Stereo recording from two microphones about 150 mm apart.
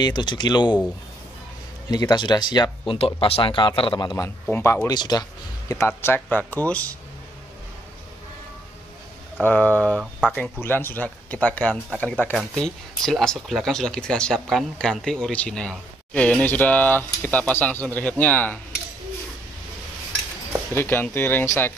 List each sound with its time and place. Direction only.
0.0 s speech: 30° left (ahead or behind)
1.9 s speech: 25° left (ahead or behind)
4.5 s speech: 15° left (ahead or behind)
5.7 s speech: 15° left (ahead or behind)
9.4 s speech: 10° left (ahead or behind)
20.7 s speech: 15° left (ahead or behind)